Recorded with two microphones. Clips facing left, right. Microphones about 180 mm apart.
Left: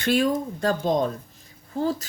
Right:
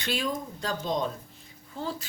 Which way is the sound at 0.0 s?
50° left (ahead or behind).